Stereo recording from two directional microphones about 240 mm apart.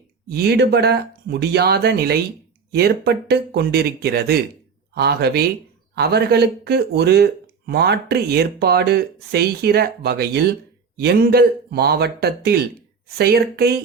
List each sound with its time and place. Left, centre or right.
0.3 s a man's voice: right